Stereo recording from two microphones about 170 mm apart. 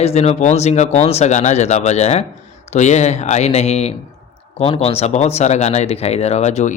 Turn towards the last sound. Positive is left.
turn(degrees=40)  # may be behind; listen again after turning